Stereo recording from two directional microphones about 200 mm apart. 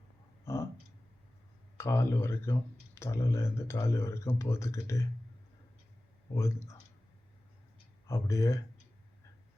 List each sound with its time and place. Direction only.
1.8 s speech: 10° left (ahead or behind)
6.3 s speech: 15° left (ahead or behind)
8.0 s speech: 15° left (ahead or behind)